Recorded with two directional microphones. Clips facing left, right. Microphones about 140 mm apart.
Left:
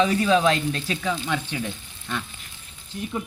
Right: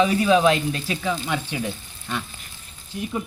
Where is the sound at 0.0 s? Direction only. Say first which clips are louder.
Right 2 dB; 10° right (ahead or behind).